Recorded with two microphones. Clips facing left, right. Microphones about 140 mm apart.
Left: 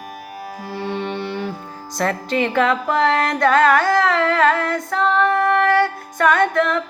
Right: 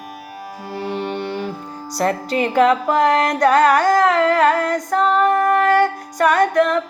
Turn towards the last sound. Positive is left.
turn(degrees=-40)  # may be behind; listen again after turning